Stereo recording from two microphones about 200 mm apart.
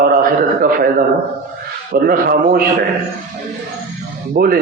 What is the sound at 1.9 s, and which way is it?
Speech, 45° right (ahead or behind).